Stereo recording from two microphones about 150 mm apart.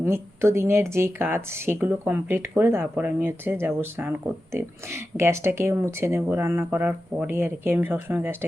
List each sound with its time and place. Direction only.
0.0 s speech: 15° right (ahead or behind)